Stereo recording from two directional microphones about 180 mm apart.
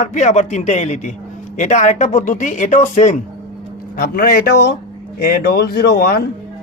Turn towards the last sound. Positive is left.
turn(degrees=60)  # may be behind; listen again after turning